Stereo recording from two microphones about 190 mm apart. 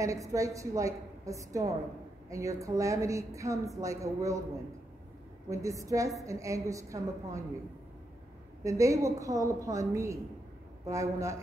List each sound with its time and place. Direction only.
0.0 s a woman's voice: 15° right (ahead or behind)
5.5 s a woman's voice: 15° right (ahead or behind)
8.6 s a woman's voice: 15° right (ahead or behind)